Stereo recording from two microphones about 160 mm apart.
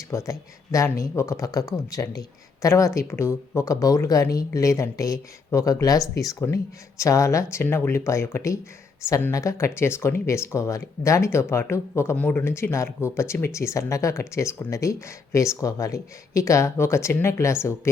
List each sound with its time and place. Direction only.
0.1 s speech: 20° left (ahead or behind)